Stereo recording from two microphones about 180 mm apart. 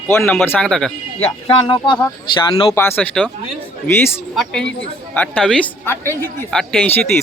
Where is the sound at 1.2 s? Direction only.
30° left (ahead or behind).